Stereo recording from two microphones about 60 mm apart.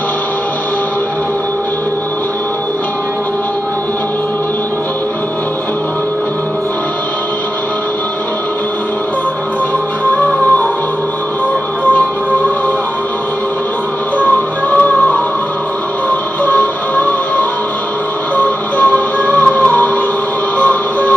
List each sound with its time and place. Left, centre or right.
14.7 s music: left
18.8 s music: left